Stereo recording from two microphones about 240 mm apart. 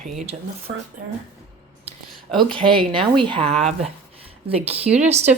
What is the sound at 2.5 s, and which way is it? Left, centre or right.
Speech, right.